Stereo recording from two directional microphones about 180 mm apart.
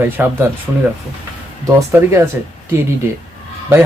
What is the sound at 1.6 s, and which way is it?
Speech, 15° right (ahead or behind).